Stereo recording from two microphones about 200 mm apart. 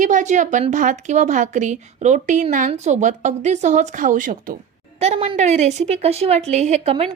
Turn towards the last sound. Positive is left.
turn(degrees=-30)  # may be behind; listen again after turning